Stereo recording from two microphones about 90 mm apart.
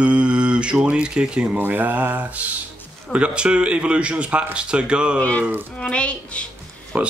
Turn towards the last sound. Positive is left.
turn(degrees=-15)  # may be behind; listen again after turning